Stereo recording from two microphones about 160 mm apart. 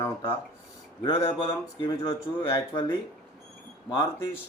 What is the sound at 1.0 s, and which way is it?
A man's voice, 35° left (ahead or behind).